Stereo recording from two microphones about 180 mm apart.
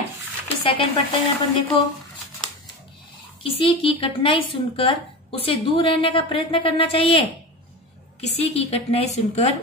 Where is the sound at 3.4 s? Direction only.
30° left (ahead or behind).